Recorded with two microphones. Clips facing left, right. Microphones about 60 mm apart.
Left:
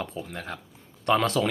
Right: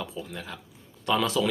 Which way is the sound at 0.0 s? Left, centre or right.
Left.